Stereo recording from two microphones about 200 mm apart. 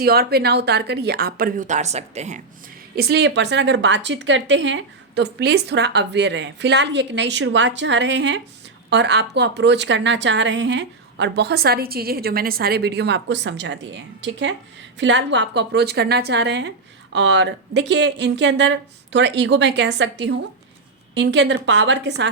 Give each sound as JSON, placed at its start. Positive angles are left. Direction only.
{"t": 0.0, "sound": "a woman's voice", "side_deg": -50}
{"t": 2.9, "sound": "a woman's voice", "side_deg": -50}